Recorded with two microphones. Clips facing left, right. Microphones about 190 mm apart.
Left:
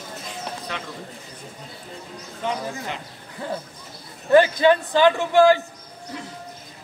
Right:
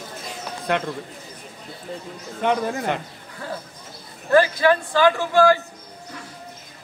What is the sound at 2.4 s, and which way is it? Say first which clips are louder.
Speech: right 6 dB; 60° right (ahead or behind).